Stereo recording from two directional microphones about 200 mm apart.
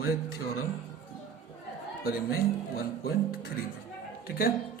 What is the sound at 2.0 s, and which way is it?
Speech, 50° left (ahead or behind).